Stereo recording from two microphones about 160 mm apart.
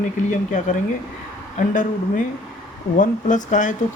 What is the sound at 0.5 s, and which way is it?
Speech, 55° left (ahead or behind).